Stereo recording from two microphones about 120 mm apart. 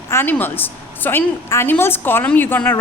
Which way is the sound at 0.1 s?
15° left (ahead or behind).